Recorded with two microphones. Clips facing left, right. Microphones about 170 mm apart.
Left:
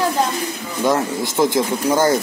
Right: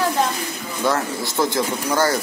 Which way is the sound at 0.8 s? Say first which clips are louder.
Left 3 dB; 15° left (ahead or behind).